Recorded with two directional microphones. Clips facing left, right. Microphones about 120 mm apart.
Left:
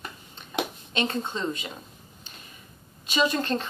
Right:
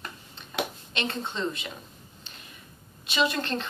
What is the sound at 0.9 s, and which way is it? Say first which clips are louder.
Speech: left 3 dB; 45° left (ahead or behind).